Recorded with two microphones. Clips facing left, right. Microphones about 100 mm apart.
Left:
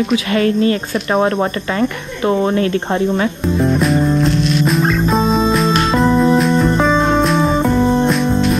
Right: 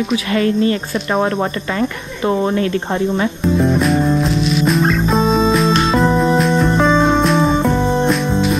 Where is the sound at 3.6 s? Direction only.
Centre (ahead or behind).